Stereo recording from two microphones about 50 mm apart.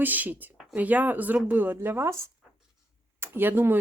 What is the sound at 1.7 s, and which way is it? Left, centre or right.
Speech, right.